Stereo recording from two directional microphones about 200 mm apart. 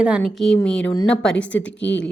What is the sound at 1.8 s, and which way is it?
Speech, 65° left (ahead or behind).